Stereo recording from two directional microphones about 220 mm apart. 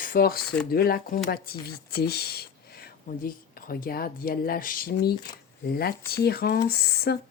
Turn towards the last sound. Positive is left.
turn(degrees=45)  # may be behind; listen again after turning